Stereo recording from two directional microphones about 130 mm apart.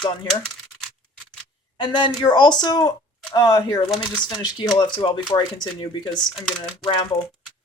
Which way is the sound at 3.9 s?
5° left (ahead or behind).